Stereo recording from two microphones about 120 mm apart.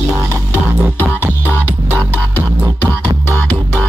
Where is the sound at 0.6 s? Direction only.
20° right (ahead or behind).